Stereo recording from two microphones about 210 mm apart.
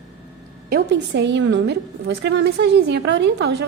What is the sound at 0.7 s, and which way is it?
A woman's voice, 55° right (ahead or behind).